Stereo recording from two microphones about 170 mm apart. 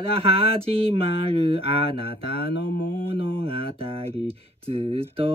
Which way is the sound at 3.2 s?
35° right (ahead or behind).